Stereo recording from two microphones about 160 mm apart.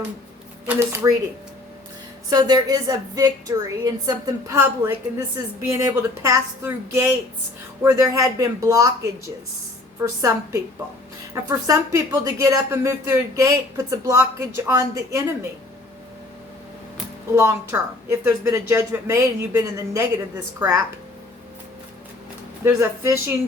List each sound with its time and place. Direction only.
0.7 s speech: 15° right (ahead or behind)
2.3 s speech: 25° right (ahead or behind)
10.0 s speech: 15° right (ahead or behind)
17.3 s speech: 15° right (ahead or behind)
22.6 s speech: 15° right (ahead or behind)